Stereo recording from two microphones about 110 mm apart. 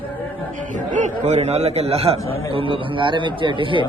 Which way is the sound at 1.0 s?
90° right.